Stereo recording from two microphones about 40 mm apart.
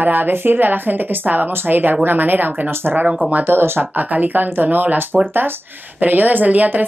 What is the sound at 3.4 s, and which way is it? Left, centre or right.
Speech, right.